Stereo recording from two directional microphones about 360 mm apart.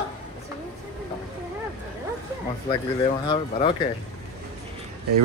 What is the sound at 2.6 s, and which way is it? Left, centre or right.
Speech, centre.